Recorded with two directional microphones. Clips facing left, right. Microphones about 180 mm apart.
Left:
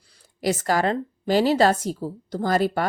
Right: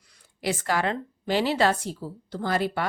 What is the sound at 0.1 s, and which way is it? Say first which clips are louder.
A woman's voice: left 5 dB; 40° left (ahead or behind).